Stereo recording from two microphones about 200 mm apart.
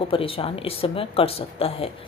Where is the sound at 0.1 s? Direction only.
25° left (ahead or behind).